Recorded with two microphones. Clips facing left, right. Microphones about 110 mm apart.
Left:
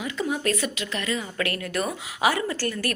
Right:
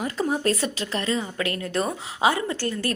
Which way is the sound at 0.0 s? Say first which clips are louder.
Right 3 dB; 40° right (ahead or behind).